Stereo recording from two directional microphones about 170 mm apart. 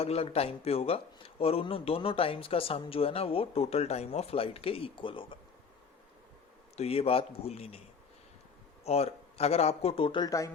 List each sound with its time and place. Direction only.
0.0 s a man's voice: 35° left (ahead or behind)
6.7 s a man's voice: 35° left (ahead or behind)
8.8 s a man's voice: 35° left (ahead or behind); by 10.5 s 20° left (ahead or behind)